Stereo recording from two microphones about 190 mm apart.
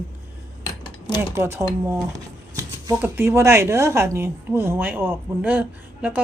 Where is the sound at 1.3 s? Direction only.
15° right (ahead or behind).